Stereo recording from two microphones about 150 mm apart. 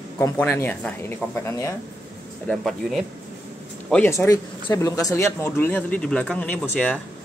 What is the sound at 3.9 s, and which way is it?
Speech, 15° left (ahead or behind).